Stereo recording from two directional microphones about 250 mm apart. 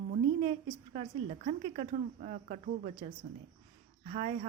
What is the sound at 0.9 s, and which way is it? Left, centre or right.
Speech, right.